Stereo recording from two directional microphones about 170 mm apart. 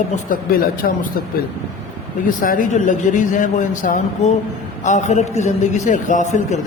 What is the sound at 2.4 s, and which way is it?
Speech, 55° left (ahead or behind).